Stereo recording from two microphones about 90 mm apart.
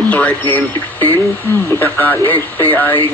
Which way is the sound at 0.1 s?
15° left (ahead or behind).